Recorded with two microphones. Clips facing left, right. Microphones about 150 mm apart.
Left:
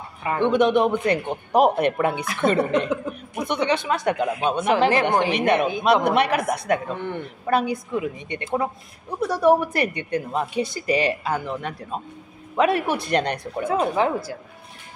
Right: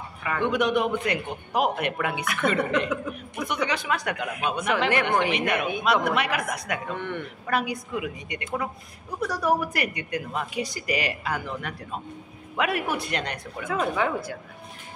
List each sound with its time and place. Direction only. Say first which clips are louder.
0.2 s a man's voice: left 6 dB; 25° left (ahead or behind)